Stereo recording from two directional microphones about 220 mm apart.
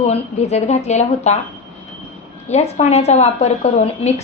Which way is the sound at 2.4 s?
30° left (ahead or behind).